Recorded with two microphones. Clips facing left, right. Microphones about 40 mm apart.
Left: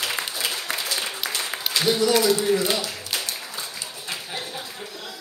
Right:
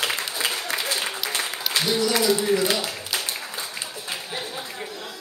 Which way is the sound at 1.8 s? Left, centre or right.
Centre.